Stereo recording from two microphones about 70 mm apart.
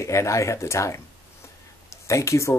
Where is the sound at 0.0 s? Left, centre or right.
Left.